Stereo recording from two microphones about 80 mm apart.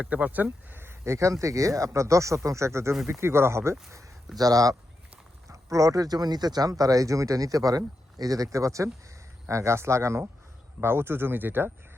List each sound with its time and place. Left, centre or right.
0.0 s speech: centre; by 3.8 s right
4.4 s speech: right